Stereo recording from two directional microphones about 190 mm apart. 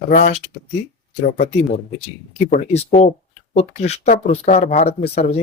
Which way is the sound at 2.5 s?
40° left (ahead or behind).